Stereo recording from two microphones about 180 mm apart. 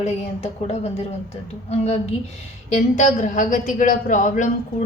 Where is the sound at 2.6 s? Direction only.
40° left (ahead or behind).